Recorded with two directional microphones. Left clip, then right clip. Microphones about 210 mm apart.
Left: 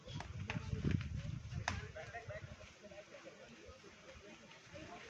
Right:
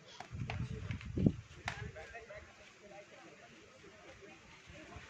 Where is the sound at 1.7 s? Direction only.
5° left (ahead or behind).